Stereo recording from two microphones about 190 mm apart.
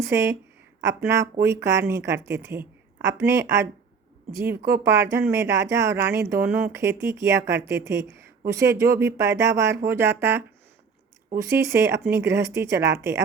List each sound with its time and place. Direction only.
0.1 s speech: 15° right (ahead or behind)